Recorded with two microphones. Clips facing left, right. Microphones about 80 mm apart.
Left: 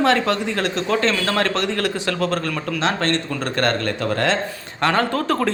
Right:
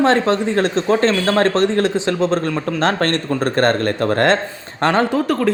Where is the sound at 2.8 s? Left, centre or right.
Right.